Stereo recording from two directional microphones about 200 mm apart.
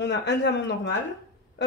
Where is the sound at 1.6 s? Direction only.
60° left (ahead or behind).